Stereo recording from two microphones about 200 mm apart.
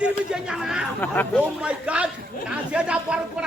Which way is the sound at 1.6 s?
5° right (ahead or behind).